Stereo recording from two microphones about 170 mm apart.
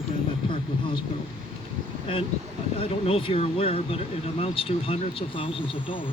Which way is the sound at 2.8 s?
35° left (ahead or behind).